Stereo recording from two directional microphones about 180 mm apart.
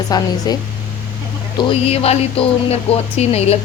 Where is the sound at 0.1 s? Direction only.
20° left (ahead or behind).